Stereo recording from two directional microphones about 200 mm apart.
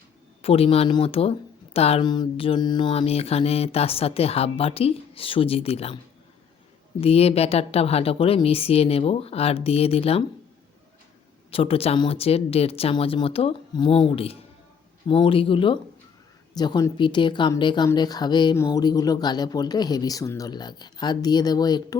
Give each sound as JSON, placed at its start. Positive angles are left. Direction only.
{"t": 0.4, "sound": "speech", "side_deg": 30}
{"t": 7.0, "sound": "speech", "side_deg": 30}
{"t": 11.5, "sound": "speech", "side_deg": 30}